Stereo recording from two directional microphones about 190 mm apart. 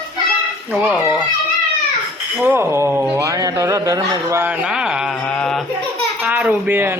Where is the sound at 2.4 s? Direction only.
10° right (ahead or behind); by 5.6 s 5° left (ahead or behind).